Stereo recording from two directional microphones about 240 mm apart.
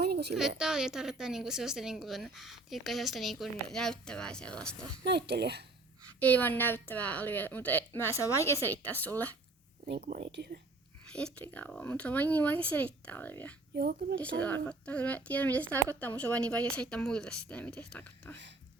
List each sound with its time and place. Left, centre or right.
0.0 s a sound: right
0.6 s a woman's voice: centre
5.0 s a child's voice: right
6.1 s a woman's voice: centre
10.2 s a child's voice: right
11.0 s a woman's voice: centre
13.7 s speech: right
14.3 s a woman's voice: centre